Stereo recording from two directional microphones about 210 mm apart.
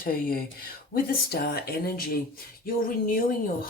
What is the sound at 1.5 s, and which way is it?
Speech, 45° left (ahead or behind).